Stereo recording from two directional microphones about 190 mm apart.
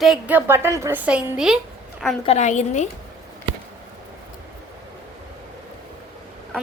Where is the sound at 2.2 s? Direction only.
35° left (ahead or behind).